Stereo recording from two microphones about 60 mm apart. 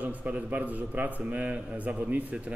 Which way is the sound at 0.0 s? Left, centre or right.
Right.